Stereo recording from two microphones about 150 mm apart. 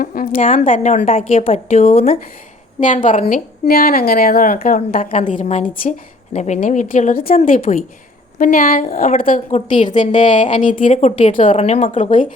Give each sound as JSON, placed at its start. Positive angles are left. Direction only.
{"t": 0.0, "sound": "a woman's voice", "side_deg": 75}
{"t": 1.4, "sound": "speech", "side_deg": 45}
{"t": 2.8, "sound": "a woman's voice", "side_deg": 60}
{"t": 5.1, "sound": "a woman's voice", "side_deg": 60}
{"t": 6.3, "sound": "a woman's voice", "side_deg": 50}
{"t": 9.6, "sound": "a woman's voice", "side_deg": 55}